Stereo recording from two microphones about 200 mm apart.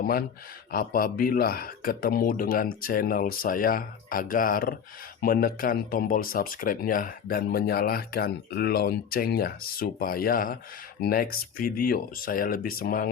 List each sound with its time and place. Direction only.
0.0 s speech: 50° left (ahead or behind)